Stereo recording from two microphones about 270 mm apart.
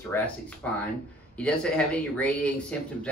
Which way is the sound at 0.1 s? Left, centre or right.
Centre.